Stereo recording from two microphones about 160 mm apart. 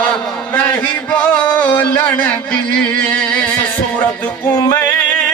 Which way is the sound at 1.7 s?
10° left (ahead or behind).